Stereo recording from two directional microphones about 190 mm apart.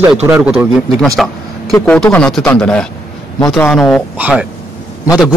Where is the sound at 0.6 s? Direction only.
Centre (ahead or behind).